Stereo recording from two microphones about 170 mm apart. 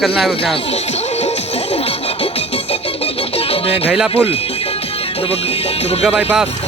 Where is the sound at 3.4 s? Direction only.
35° left (ahead or behind).